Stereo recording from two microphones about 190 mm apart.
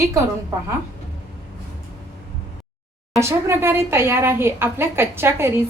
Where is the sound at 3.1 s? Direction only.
15° right (ahead or behind).